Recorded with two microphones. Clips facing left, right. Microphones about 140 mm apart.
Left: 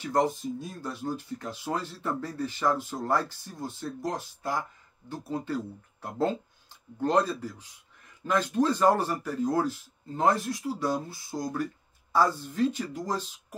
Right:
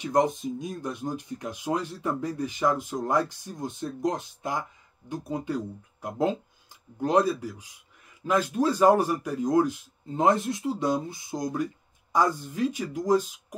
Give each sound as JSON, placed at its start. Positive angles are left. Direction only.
{"t": 0.0, "sound": "speech", "side_deg": -15}